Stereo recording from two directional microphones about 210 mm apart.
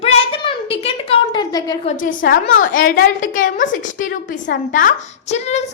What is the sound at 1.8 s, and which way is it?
A child's voice, 35° left (ahead or behind).